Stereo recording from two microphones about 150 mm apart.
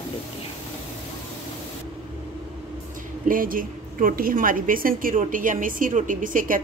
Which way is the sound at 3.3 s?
65° right (ahead or behind).